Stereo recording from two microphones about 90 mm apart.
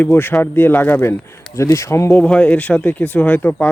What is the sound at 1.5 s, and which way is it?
Speech, 35° left (ahead or behind).